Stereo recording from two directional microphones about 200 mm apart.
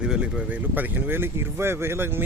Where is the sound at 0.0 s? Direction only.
5° right (ahead or behind).